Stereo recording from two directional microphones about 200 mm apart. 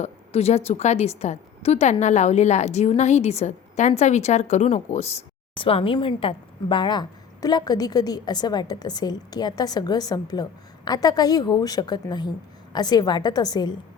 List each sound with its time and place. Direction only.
0.0 s a woman's voice: 30° left (ahead or behind)